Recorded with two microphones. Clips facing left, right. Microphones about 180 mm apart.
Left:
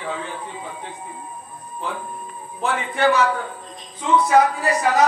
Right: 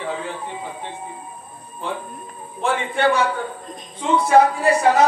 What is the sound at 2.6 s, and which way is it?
Speech, 30° right (ahead or behind).